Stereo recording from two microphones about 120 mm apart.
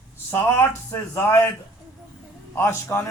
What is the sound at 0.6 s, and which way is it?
Speech, 20° left (ahead or behind).